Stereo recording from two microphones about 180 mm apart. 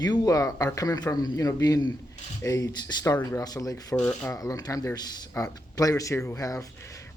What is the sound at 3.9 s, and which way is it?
Speech, 5° left (ahead or behind).